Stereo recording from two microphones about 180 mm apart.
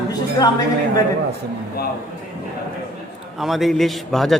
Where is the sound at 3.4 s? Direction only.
Centre (ahead or behind).